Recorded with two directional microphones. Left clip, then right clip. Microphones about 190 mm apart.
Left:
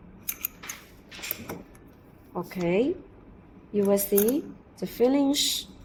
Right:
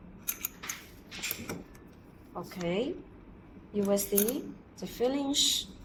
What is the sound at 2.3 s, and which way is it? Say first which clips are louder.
Speech: left 7 dB; 35° left (ahead or behind).